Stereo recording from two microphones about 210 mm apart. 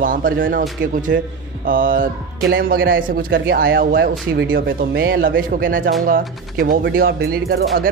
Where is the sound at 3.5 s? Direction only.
45° right (ahead or behind).